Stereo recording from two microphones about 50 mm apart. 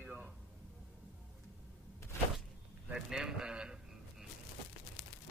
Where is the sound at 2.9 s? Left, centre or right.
Centre.